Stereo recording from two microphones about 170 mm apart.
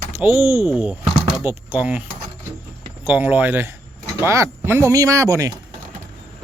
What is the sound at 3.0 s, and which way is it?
Speech, 10° right (ahead or behind).